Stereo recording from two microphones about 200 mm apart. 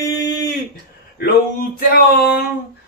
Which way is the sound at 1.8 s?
50° left (ahead or behind).